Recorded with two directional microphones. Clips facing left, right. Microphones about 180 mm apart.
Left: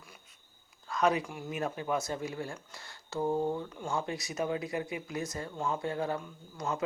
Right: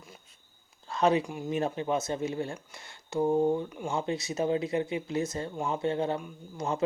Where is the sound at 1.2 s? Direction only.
20° right (ahead or behind).